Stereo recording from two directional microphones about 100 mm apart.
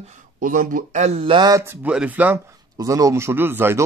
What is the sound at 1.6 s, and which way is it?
Speech, 20° right (ahead or behind).